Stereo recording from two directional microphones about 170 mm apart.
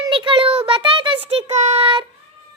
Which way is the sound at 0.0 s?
30° right (ahead or behind).